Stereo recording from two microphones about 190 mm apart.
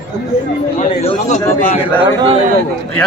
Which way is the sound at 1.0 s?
35° left (ahead or behind).